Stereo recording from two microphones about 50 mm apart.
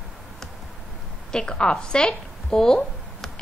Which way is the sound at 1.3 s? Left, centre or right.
Centre.